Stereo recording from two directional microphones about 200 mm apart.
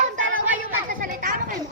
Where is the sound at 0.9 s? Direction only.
45° right (ahead or behind).